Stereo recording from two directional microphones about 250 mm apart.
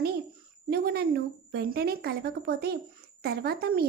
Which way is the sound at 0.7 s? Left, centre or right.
Right.